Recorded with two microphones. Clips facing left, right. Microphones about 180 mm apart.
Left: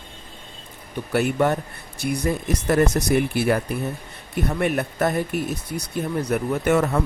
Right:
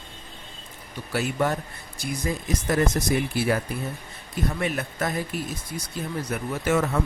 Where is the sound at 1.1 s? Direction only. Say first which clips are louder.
Left 5 dB; 60° left (ahead or behind).